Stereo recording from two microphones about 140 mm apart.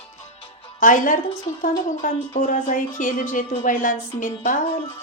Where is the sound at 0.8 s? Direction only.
70° left (ahead or behind).